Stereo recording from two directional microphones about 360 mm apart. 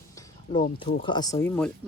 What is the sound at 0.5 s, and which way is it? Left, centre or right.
Speech, centre.